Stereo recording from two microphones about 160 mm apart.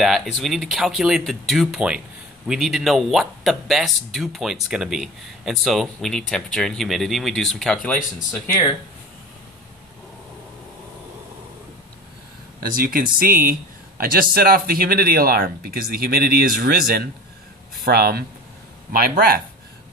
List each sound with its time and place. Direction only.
0.0 s speech: centre (ahead or behind)
12.7 s speech: 60° right (ahead or behind)